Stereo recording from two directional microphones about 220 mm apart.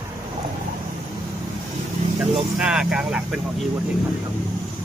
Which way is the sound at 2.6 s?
Centre (ahead or behind).